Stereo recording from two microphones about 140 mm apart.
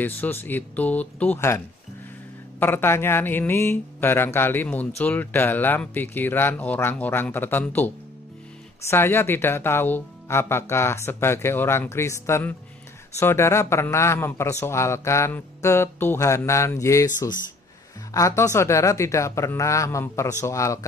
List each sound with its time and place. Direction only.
0.0 s speech: 15° left (ahead or behind)
2.6 s a man's voice: 15° left (ahead or behind)